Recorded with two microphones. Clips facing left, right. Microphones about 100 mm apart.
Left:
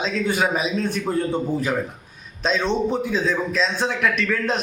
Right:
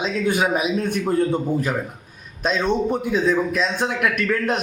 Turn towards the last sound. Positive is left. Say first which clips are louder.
# right 1 dB
turn(degrees=-10)  # may be behind; listen again after turning